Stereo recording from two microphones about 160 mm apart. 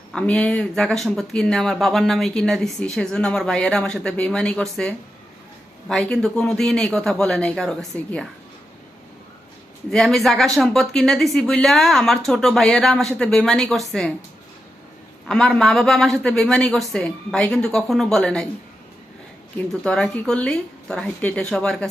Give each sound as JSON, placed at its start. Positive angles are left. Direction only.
{"t": 0.1, "sound": "speech", "side_deg": 5}
{"t": 9.9, "sound": "speech", "side_deg": 0}
{"t": 15.3, "sound": "speech", "side_deg": 5}
{"t": 19.5, "sound": "speech", "side_deg": 5}